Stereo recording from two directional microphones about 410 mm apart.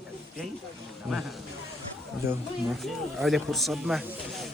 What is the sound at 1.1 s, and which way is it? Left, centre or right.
Speech, centre.